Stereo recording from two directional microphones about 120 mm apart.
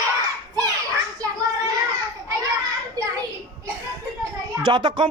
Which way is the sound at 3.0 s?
30° right (ahead or behind).